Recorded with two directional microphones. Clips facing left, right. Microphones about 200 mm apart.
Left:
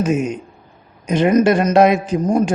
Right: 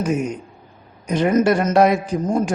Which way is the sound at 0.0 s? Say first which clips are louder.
Left 3 dB; 20° left (ahead or behind).